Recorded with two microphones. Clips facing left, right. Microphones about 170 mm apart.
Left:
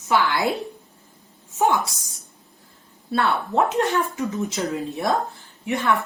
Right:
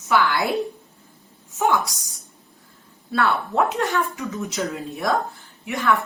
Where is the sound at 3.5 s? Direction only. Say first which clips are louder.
Left 1 dB; 20° left (ahead or behind).